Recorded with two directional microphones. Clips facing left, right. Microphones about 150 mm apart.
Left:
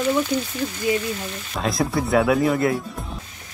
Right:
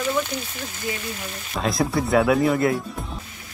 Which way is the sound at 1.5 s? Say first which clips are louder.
Even; centre (ahead or behind).